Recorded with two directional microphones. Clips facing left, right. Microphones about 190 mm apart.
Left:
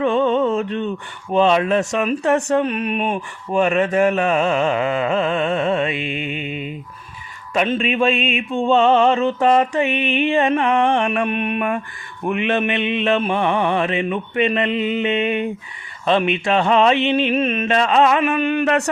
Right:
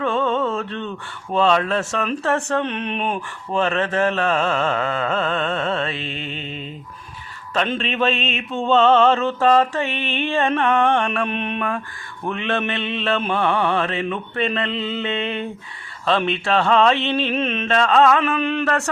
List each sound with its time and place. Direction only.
0.0 s mantra: 15° left (ahead or behind)